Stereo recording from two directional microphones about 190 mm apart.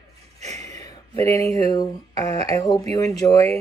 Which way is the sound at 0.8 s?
15° left (ahead or behind).